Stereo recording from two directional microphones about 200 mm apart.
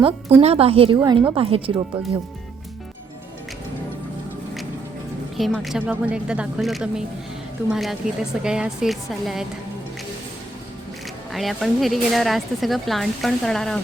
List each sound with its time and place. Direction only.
0.3 s a woman's voice: 30° right (ahead or behind)
5.4 s speech: centre (ahead or behind)
11.3 s speech: centre (ahead or behind)